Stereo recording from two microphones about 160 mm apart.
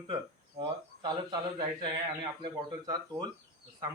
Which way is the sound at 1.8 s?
25° right (ahead or behind).